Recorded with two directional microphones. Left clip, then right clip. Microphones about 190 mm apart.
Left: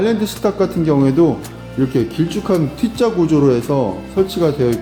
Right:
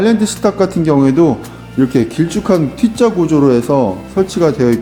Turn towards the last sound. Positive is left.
turn(degrees=-25)  # may be behind; listen again after turning